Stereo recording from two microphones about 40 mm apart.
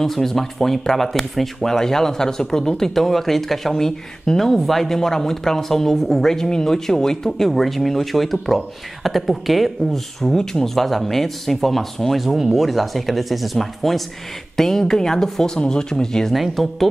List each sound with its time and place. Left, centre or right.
0.0 s speech: centre
10.2 s speech: centre
16.3 s speech: centre